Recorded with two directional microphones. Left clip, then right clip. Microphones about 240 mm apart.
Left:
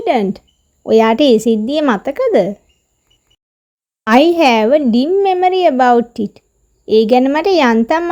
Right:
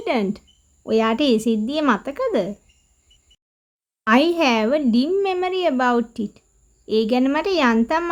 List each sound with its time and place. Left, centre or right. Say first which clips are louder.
0.0 s a child's voice: left 8 dB; centre
4.0 s a child's voice: left 7 dB; centre